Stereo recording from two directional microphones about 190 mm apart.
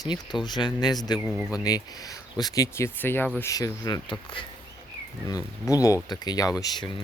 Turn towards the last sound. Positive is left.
turn(degrees=20)  # may be behind; listen again after turning